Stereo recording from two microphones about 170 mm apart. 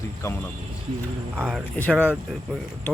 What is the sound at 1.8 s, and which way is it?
Speech, 10° left (ahead or behind).